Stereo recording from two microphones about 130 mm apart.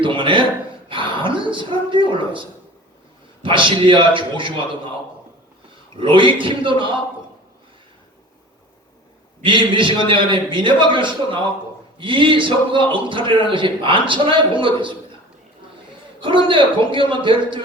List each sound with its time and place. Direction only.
0.0 s a woman's voice: 40° right (ahead or behind)
3.4 s a man's voice: 40° right (ahead or behind)
6.0 s a man's voice: 40° right (ahead or behind)
9.4 s a man's voice: 40° right (ahead or behind)
16.2 s a man's voice: 40° right (ahead or behind)